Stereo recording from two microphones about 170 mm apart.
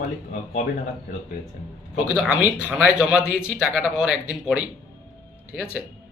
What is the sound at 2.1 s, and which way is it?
Speech, 5° right (ahead or behind).